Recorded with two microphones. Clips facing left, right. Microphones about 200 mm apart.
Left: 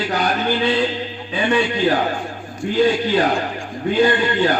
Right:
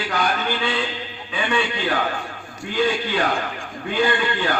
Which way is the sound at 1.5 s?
35° left (ahead or behind).